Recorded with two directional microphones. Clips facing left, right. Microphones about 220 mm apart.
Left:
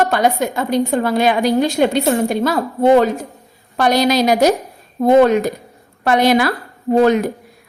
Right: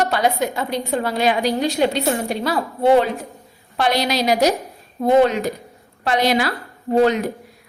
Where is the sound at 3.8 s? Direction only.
45° left (ahead or behind).